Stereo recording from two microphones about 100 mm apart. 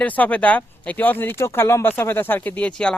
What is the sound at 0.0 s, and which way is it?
Speech, 15° left (ahead or behind).